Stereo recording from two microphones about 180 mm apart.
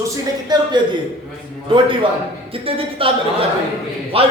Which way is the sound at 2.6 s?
30° right (ahead or behind).